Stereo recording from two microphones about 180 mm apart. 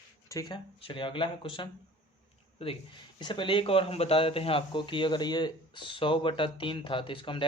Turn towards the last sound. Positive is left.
turn(degrees=30)  # may be behind; listen again after turning